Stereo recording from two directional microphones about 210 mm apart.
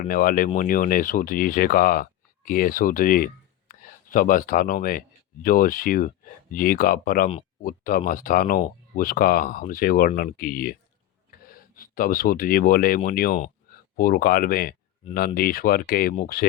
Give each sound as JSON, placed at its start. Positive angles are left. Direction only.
{"t": 0.0, "sound": "speech", "side_deg": 40}